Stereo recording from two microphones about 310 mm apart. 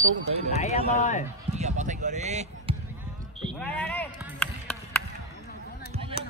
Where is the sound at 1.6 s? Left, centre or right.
Right.